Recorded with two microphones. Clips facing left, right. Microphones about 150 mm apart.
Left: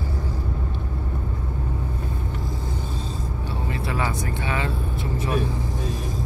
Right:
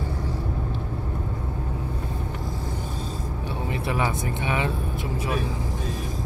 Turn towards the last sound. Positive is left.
turn(degrees=-15)  # may be behind; listen again after turning